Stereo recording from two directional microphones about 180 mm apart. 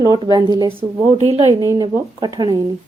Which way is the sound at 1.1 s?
35° right (ahead or behind).